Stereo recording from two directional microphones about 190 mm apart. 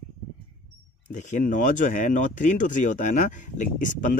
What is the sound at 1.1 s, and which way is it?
Speech, 40° left (ahead or behind).